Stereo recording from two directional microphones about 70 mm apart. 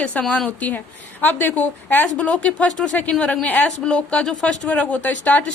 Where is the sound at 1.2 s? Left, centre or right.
Left.